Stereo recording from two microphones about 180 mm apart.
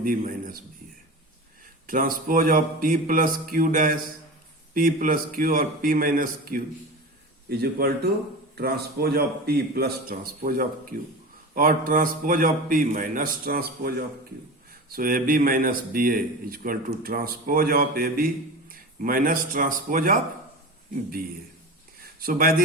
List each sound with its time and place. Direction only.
0.0 s speech: 50° right (ahead or behind)
1.9 s a man's voice: 50° right (ahead or behind)
22.0 s a sound: 55° right (ahead or behind)